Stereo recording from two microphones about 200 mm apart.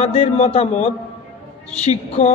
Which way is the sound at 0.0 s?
30° left (ahead or behind).